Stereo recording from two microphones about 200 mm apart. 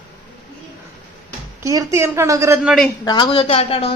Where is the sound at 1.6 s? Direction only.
15° right (ahead or behind).